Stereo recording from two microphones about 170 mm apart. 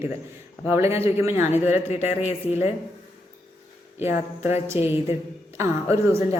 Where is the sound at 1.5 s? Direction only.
40° left (ahead or behind).